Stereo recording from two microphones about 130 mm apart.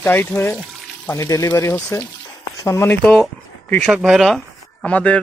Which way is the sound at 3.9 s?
5° right (ahead or behind).